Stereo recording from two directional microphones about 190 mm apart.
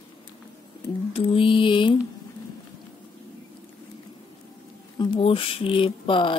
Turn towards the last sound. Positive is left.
turn(degrees=25)  # may be behind; listen again after turning